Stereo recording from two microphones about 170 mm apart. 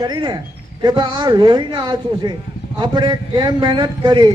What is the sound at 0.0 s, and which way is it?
A man's voice, 25° right (ahead or behind).